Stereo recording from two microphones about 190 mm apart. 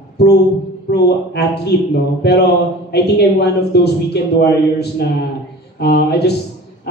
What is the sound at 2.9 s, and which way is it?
A man's voice, 60° left (ahead or behind).